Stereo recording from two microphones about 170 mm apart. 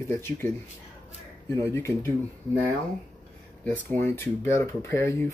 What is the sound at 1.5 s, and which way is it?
Speech, 15° left (ahead or behind).